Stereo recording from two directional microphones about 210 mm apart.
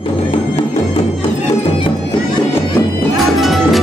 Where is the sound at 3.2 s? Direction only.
Centre (ahead or behind).